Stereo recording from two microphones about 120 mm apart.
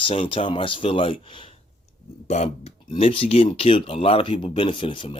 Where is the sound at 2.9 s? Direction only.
50° left (ahead or behind).